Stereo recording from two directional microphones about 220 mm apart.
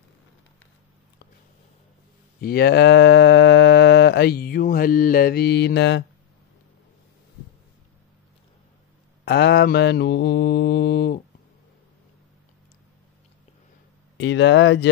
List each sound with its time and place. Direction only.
2.4 s speech: 45° left (ahead or behind)
9.2 s mantra: 50° left (ahead or behind)
14.1 s speech: 55° left (ahead or behind)